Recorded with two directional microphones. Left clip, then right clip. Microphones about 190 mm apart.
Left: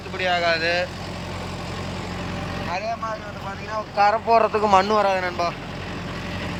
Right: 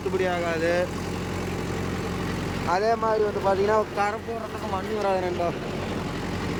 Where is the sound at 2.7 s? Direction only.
25° right (ahead or behind).